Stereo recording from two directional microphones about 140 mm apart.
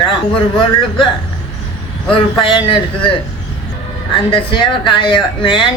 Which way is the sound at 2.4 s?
35° left (ahead or behind).